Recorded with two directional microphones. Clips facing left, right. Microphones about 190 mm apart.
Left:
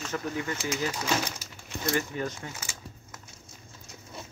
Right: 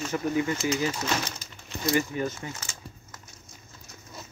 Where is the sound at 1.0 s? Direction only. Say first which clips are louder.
Even; 10° left (ahead or behind).